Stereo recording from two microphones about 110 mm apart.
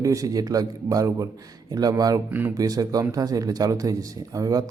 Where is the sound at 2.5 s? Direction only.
35° right (ahead or behind).